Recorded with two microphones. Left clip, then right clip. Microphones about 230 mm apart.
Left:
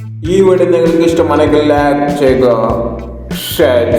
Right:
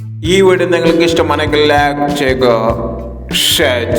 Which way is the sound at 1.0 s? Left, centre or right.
Right.